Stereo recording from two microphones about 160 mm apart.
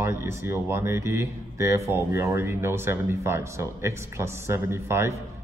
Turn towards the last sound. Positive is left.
turn(degrees=-15)  # may be behind; listen again after turning